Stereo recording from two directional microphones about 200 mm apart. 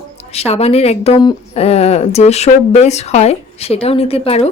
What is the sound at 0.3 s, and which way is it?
A woman's voice, 30° left (ahead or behind).